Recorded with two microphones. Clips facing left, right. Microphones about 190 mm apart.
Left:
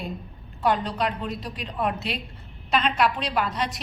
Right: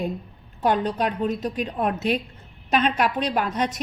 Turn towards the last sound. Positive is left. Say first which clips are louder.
# right 3 dB
turn(degrees=-45)  # may be behind; listen again after turning